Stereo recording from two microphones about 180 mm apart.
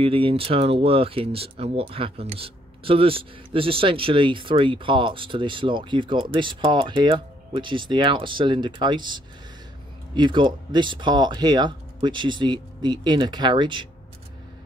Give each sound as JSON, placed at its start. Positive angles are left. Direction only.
{"t": 0.0, "sound": "speech", "side_deg": -30}